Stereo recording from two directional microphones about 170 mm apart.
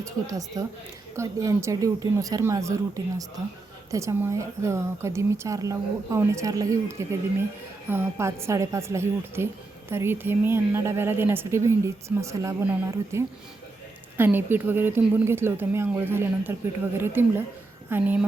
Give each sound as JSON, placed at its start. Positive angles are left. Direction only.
{"t": 0.0, "sound": "speech", "side_deg": -20}